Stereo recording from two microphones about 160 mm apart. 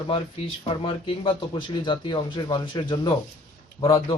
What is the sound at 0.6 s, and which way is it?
Speech, 30° left (ahead or behind).